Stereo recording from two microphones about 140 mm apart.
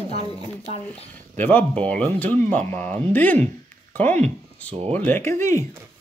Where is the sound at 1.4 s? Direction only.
10° left (ahead or behind).